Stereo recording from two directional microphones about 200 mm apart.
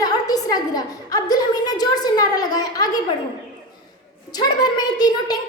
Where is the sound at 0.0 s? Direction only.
20° left (ahead or behind).